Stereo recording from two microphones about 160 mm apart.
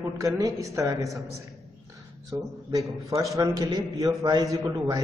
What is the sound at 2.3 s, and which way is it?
A man's voice, 20° right (ahead or behind).